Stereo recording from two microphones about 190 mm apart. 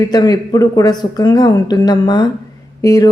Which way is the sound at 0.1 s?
20° left (ahead or behind).